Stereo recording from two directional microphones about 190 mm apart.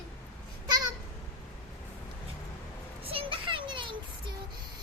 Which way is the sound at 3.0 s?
30° right (ahead or behind).